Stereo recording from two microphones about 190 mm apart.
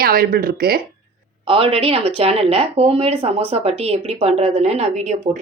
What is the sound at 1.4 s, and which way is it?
Speech, 30° right (ahead or behind).